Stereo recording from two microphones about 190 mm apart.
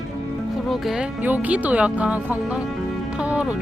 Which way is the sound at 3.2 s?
5° right (ahead or behind).